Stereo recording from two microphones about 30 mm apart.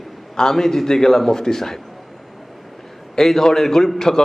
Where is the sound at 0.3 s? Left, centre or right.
Centre.